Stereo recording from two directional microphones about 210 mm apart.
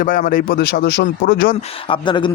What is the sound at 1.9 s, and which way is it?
Speech, 20° left (ahead or behind).